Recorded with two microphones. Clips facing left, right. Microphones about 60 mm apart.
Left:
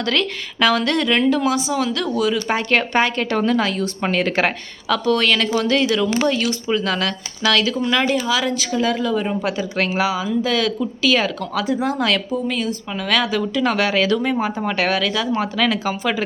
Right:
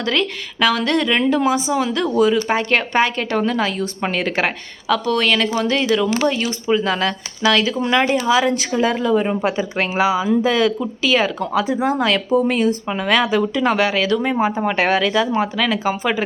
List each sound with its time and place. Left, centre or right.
0.0 s a woman's voice: centre
1.3 s a woman's voice: centre
2.5 s a woman's voice: centre
12.5 s speech: right
12.9 s a woman's voice: right; by 14.2 s centre
14.2 s a woman's voice: centre
15.5 s a woman's voice: centre